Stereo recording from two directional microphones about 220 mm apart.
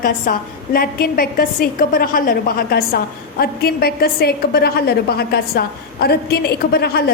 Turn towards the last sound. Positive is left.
turn(degrees=45)  # may be behind; listen again after turning